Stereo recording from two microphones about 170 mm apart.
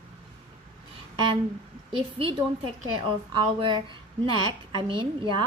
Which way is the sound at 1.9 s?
30° right (ahead or behind).